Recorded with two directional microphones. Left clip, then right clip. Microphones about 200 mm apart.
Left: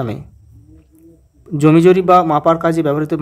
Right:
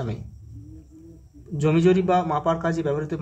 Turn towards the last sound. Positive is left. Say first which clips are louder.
# left 9 dB
turn(degrees=45)  # may be behind; listen again after turning